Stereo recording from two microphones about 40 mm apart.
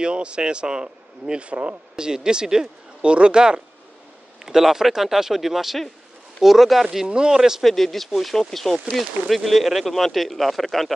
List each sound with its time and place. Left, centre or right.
0.0 s speech: right
1.5 s speech: right
2.0 s speech: centre
4.5 s speech: centre
7.1 s speech: right
7.6 s speech: centre